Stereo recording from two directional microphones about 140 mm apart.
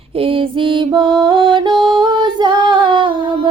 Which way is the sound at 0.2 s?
40° right (ahead or behind).